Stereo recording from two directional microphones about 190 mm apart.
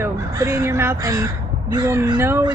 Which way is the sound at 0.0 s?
15° right (ahead or behind).